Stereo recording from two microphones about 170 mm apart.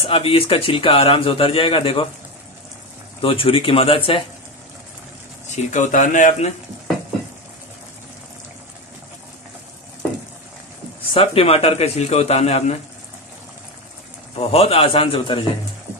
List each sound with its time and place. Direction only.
0.0 s a man's voice: 35° left (ahead or behind)
3.2 s a man's voice: 30° left (ahead or behind)
5.5 s speech: 45° left (ahead or behind)
11.1 s a man's voice: 35° left (ahead or behind)
14.3 s a man's voice: 35° left (ahead or behind)